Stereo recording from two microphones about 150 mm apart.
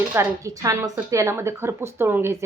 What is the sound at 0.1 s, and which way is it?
Speech, 20° right (ahead or behind).